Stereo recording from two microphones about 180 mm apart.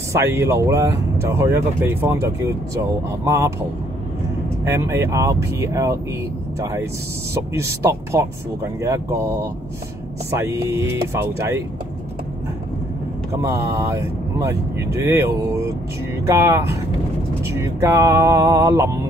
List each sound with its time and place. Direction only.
0.1 s speech: 15° right (ahead or behind)
4.6 s speech: 15° right (ahead or behind)
13.3 s speech: 15° right (ahead or behind)
16.3 s speech: 15° right (ahead or behind)